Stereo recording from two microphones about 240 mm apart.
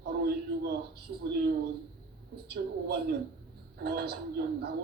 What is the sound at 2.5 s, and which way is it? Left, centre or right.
A man's voice, right.